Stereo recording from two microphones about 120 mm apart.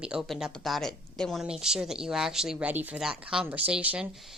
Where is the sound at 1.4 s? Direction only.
5° right (ahead or behind).